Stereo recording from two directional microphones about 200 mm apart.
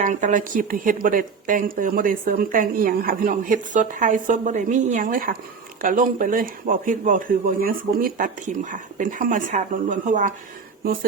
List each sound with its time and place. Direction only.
0.0 s a woman's voice: 40° right (ahead or behind)